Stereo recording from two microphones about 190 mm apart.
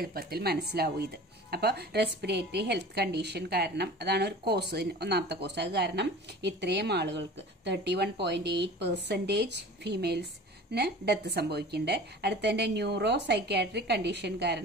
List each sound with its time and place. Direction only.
0.0 s a woman's voice: 50° right (ahead or behind)